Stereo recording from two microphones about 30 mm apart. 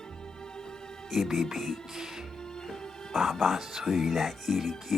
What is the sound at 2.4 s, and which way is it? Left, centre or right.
Music, left.